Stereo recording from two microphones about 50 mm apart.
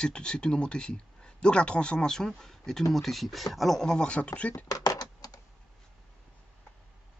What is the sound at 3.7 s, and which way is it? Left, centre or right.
Speech, centre.